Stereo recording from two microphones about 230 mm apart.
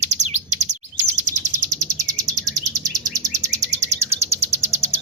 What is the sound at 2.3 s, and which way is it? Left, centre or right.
Chirp, centre.